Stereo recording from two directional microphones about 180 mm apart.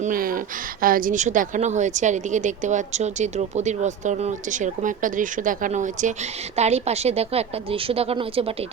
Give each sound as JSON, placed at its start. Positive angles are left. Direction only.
{"t": 0.0, "sound": "a woman's voice", "side_deg": -50}